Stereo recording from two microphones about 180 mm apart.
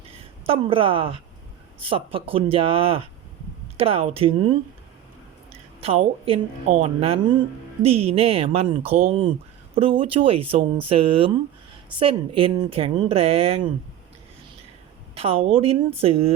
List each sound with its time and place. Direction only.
0.4 s a woman's voice: 30° right (ahead or behind)
5.8 s speech: 30° right (ahead or behind)
15.1 s speech: 30° right (ahead or behind)